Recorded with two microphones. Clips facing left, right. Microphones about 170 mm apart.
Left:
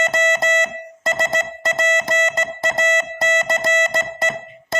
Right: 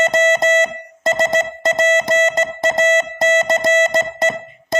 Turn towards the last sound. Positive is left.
turn(degrees=-20)  # may be behind; listen again after turning